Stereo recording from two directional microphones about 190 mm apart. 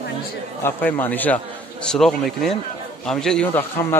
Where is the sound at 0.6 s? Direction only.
10° left (ahead or behind).